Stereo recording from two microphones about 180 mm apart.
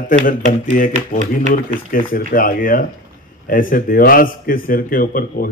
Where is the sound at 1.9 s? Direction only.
50° left (ahead or behind).